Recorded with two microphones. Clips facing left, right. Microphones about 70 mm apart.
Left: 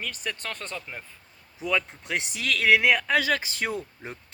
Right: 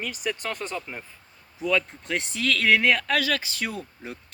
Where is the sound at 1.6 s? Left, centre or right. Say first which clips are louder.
Right 2 dB; centre.